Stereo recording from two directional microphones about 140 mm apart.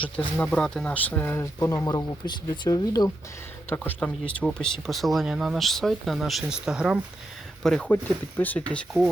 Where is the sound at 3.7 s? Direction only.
15° left (ahead or behind); by 7.0 s 5° right (ahead or behind).